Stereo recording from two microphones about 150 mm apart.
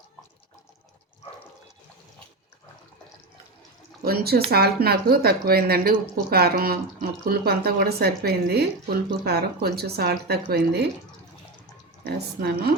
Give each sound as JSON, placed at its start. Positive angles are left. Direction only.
{"t": 4.0, "sound": "speech", "side_deg": -90}
{"t": 12.0, "sound": "speech", "side_deg": -90}